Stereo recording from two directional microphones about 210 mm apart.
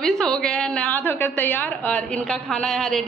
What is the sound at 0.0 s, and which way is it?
A woman's voice, 5° left (ahead or behind).